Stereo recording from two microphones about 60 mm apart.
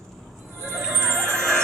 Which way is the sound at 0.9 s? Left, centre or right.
Right.